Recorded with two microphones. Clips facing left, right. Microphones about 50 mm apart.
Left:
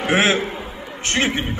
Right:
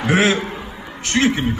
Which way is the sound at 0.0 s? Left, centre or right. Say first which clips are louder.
Right 1 dB; left.